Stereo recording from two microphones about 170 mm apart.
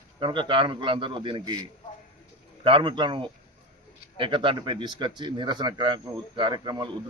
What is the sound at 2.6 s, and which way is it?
Speech, 30° right (ahead or behind).